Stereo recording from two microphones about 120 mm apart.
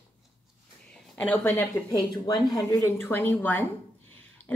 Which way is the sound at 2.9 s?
15° left (ahead or behind).